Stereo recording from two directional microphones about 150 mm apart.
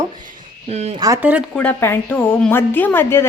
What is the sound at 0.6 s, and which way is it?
Speech, 45° right (ahead or behind).